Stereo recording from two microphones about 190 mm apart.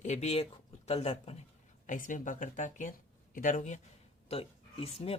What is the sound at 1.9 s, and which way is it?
Speech, 45° left (ahead or behind).